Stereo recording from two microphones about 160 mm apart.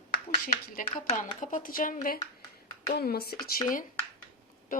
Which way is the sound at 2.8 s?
70° left (ahead or behind).